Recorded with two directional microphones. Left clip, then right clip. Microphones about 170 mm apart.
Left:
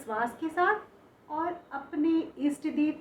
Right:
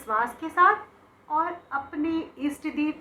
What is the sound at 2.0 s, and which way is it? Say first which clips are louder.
Speech: left 5 dB; 40° left (ahead or behind).